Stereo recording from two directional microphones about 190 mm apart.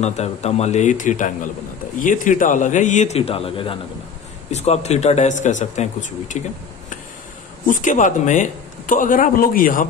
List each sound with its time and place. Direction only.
0.0 s speech: 35° left (ahead or behind)
7.6 s a man's voice: 45° left (ahead or behind)